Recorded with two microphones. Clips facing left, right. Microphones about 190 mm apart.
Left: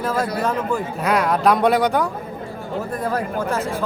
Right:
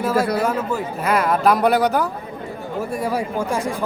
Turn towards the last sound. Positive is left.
turn(degrees=-15)  # may be behind; listen again after turning